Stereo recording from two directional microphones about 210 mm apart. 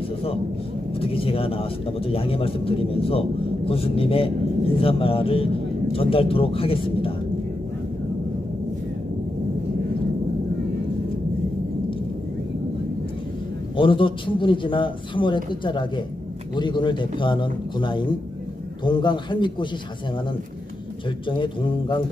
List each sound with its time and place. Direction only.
0.9 s speech: 25° left (ahead or behind)
13.7 s speech: 25° left (ahead or behind)
21.3 s speech: 25° left (ahead or behind)